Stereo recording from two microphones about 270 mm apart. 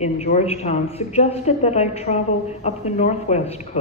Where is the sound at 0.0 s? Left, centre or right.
Left.